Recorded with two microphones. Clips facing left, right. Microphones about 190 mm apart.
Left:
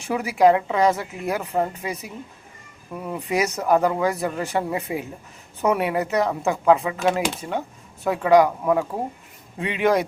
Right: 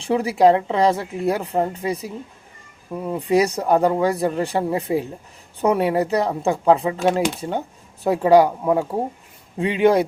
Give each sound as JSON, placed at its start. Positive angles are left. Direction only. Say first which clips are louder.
{"t": 0.0, "sound": "a woman's voice", "louder": "right 2 dB", "side_deg": -30}
{"t": 8.0, "sound": "a woman's voice", "louder": "right 2 dB", "side_deg": -30}